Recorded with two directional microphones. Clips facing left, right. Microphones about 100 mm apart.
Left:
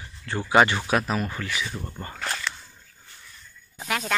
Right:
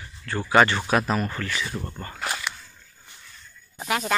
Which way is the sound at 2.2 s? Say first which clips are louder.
Right 1 dB; 10° right (ahead or behind).